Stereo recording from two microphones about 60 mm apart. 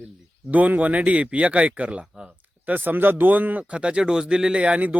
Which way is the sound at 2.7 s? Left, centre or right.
Right.